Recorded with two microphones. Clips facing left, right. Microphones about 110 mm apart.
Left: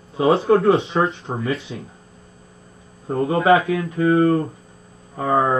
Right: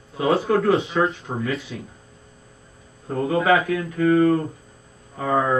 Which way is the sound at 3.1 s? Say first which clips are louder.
Left 3 dB; 30° left (ahead or behind).